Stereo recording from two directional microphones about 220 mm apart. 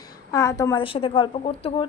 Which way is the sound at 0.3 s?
15° left (ahead or behind).